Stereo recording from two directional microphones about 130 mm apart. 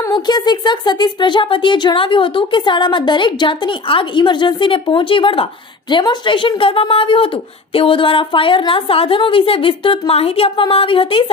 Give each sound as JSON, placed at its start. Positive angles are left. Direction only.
{"t": 0.1, "sound": "a woman's voice", "side_deg": 30}